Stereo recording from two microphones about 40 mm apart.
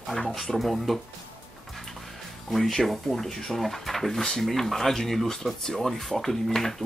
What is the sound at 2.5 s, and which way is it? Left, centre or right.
Speech, centre.